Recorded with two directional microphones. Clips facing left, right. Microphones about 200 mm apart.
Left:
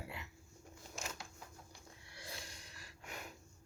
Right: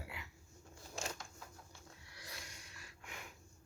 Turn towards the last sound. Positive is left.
turn(degrees=40)  # may be behind; listen again after turning